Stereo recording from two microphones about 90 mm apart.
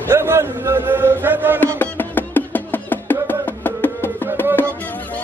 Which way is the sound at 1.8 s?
20° left (ahead or behind).